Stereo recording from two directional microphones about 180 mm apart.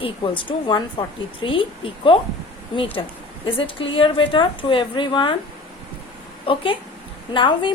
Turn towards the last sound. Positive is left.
turn(degrees=25)  # may be behind; listen again after turning